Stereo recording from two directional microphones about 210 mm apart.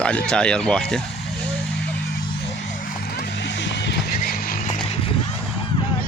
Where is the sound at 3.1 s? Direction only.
55° left (ahead or behind).